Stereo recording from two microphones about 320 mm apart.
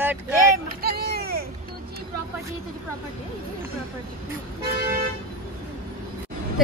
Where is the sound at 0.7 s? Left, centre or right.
Right.